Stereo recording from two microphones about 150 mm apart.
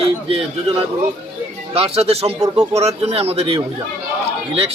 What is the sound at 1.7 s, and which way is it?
A man's voice, 40° right (ahead or behind).